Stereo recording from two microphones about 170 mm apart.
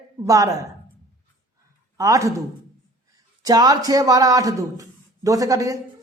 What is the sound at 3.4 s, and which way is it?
Speech, 20° right (ahead or behind).